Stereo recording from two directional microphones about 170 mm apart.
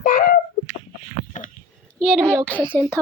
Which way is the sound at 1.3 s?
50° left (ahead or behind).